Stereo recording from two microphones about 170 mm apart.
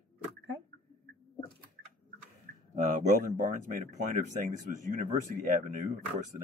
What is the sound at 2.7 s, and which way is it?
Speech, 45° right (ahead or behind).